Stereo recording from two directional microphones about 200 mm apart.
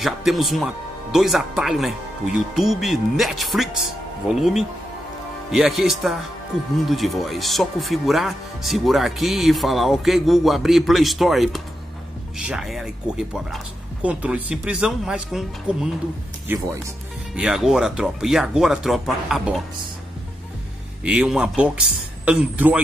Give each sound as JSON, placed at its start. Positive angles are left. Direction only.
{"t": 0.0, "sound": "speech", "side_deg": 0}
{"t": 16.4, "sound": "speech", "side_deg": -15}
{"t": 17.4, "sound": "speech", "side_deg": -5}
{"t": 21.0, "sound": "speech", "side_deg": -5}